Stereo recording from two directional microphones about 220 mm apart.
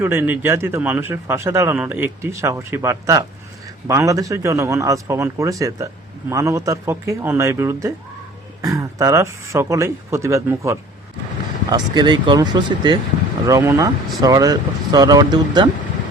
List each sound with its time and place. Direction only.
0.0 s a man's voice: 10° right (ahead or behind)